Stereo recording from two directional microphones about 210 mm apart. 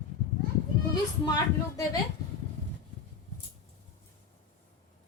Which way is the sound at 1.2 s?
20° left (ahead or behind).